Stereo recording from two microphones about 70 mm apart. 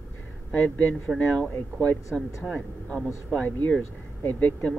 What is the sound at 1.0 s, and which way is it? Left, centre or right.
Speech, centre.